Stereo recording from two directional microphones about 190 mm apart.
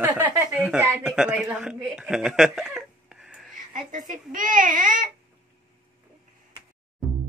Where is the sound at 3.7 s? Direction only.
45° right (ahead or behind).